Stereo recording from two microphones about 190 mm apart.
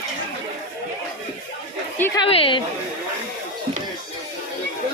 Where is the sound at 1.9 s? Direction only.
10° left (ahead or behind).